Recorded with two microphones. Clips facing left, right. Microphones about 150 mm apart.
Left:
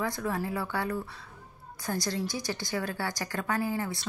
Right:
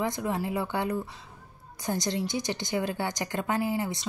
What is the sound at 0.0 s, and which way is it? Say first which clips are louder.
A woman's voice: right 2 dB; 20° right (ahead or behind).